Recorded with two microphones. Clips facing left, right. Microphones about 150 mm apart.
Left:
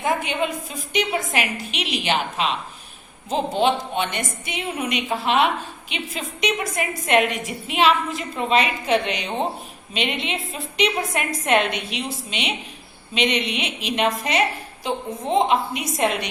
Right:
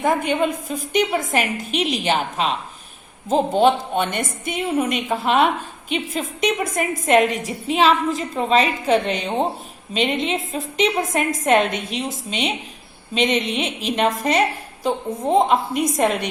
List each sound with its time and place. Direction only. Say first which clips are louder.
0.0 s a woman's voice: right 4 dB; 45° right (ahead or behind)